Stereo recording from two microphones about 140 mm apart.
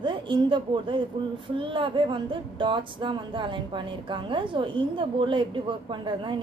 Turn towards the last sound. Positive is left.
turn(degrees=-35)  # may be behind; listen again after turning